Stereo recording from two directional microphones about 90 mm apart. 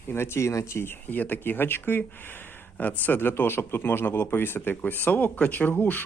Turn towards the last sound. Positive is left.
turn(degrees=20)  # may be behind; listen again after turning